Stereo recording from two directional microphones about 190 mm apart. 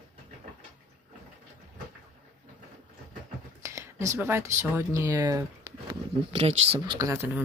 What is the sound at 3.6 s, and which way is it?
Speech, 15° right (ahead or behind).